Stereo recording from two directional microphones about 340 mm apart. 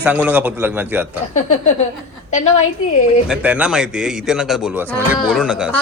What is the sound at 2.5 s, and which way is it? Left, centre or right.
Speech, left.